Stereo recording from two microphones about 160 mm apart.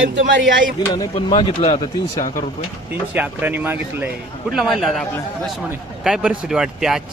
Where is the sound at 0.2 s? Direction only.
90° right.